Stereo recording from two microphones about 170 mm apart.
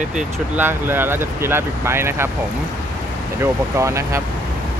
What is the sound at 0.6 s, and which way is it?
Speech, 15° right (ahead or behind).